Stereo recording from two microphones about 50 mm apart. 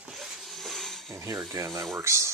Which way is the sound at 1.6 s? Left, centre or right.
Right.